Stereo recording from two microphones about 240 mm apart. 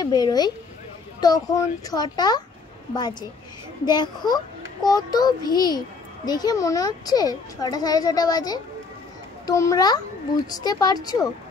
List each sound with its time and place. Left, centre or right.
0.0 s a child's voice: centre